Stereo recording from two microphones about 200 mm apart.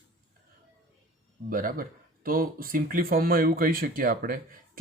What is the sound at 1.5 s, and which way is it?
Speech, 45° right (ahead or behind).